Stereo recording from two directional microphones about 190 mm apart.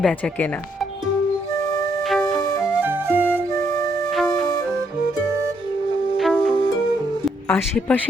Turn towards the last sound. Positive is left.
turn(degrees=5)  # may be behind; listen again after turning